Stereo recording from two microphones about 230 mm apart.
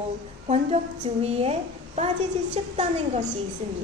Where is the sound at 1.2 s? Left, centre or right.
Right.